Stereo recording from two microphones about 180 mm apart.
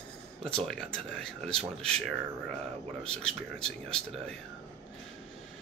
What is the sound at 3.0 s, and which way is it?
Speech, 5° left (ahead or behind).